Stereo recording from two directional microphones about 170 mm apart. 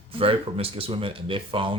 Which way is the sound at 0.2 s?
35° right (ahead or behind).